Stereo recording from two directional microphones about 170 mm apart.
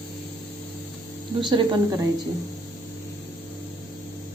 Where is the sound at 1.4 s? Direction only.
25° right (ahead or behind).